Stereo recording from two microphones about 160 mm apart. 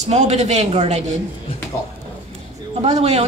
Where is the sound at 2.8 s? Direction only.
45° right (ahead or behind).